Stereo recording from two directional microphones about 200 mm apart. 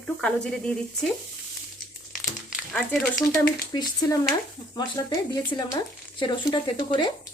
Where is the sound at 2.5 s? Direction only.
5° left (ahead or behind).